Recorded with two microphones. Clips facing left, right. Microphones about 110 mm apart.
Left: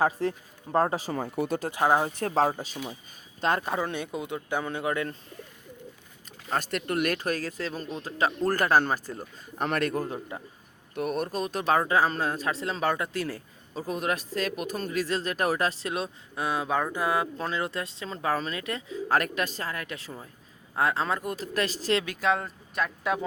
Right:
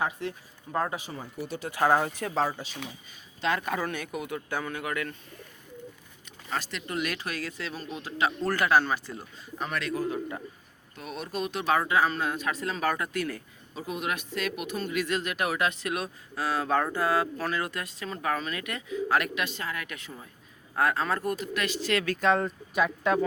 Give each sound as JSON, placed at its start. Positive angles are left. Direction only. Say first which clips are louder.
{"t": 0.0, "sound": "speech", "louder": "left 5 dB", "side_deg": 40}
{"t": 1.1, "sound": "speech", "louder": "left 8 dB", "side_deg": 55}
{"t": 1.7, "sound": "speech", "louder": "right 1 dB", "side_deg": 20}
{"t": 2.2, "sound": "speech", "louder": "left 4 dB", "side_deg": 40}
{"t": 3.7, "sound": "speech", "louder": "left 1 dB", "side_deg": 25}
{"t": 6.5, "sound": "speech", "louder": "left 4 dB", "side_deg": 50}
{"t": 21.3, "sound": "speech", "louder": "left 1 dB", "side_deg": 35}
{"t": 21.9, "sound": "speech", "louder": "right 2 dB", "side_deg": 15}
{"t": 22.2, "sound": "speech", "louder": "right 2 dB", "side_deg": 0}